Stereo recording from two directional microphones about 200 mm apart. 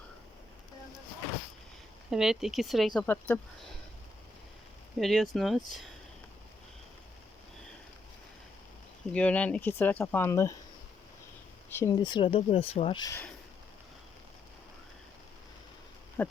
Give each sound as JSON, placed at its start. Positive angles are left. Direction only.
{"t": 2.0, "sound": "speech", "side_deg": 0}
{"t": 4.9, "sound": "speech", "side_deg": 0}
{"t": 9.1, "sound": "speech", "side_deg": 5}
{"t": 11.7, "sound": "speech", "side_deg": 15}